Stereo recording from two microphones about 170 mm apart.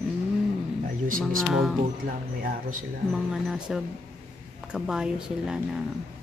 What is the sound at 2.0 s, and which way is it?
Speech, 60° right (ahead or behind).